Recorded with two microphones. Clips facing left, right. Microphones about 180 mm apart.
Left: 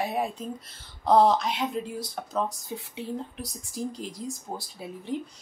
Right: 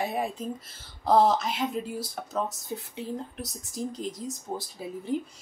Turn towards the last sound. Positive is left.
turn(degrees=0)  # may be behind; listen again after turning